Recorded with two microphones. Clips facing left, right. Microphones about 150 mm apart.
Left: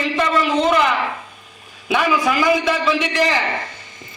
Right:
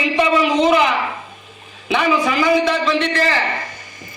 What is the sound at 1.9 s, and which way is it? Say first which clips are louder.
A man's voice: right 1 dB; 5° left (ahead or behind).